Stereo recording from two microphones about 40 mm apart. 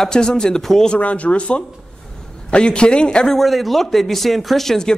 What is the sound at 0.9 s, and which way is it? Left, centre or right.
Speech, left.